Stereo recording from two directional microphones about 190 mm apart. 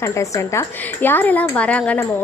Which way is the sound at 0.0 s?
15° left (ahead or behind).